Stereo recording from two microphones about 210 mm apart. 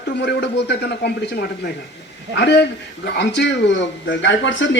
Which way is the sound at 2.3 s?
55° left (ahead or behind).